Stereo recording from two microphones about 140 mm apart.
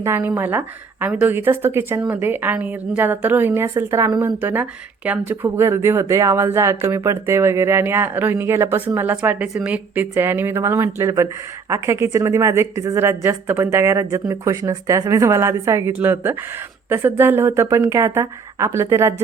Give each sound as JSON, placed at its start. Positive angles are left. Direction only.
{"t": 0.0, "sound": "a woman's voice", "side_deg": -15}